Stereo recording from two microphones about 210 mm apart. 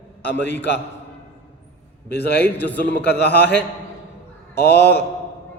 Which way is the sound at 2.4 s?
10° left (ahead or behind).